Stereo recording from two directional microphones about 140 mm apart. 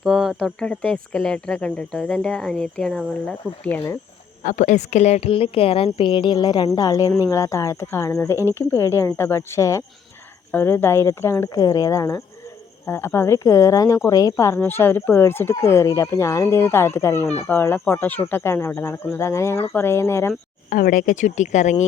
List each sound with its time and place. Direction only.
0.0 s speech: 5° right (ahead or behind)
4.4 s a woman's voice: 60° left (ahead or behind); by 20.3 s 20° left (ahead or behind)
20.7 s speech: 90° left; by 21.8 s 60° left (ahead or behind)